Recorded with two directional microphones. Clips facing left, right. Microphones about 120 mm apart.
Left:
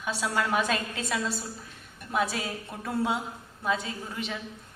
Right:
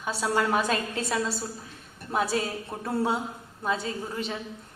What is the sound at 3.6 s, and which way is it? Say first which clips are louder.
Speech: right 1 dB; 30° right (ahead or behind).